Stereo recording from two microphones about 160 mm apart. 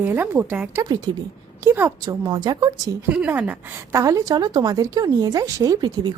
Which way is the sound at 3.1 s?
10° right (ahead or behind).